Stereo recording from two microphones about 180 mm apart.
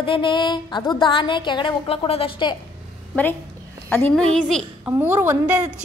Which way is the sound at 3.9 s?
5° left (ahead or behind).